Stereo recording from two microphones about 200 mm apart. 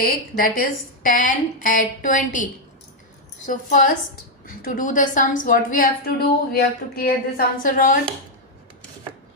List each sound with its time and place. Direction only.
0.0 s a woman's voice: 50° left (ahead or behind)